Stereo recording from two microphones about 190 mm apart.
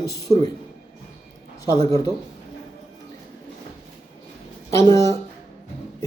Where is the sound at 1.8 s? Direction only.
20° left (ahead or behind).